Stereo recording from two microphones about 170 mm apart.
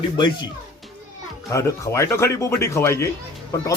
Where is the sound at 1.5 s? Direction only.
20° left (ahead or behind).